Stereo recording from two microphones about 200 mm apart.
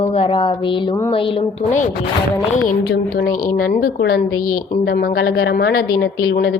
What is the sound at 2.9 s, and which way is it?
A woman's voice, 50° left (ahead or behind).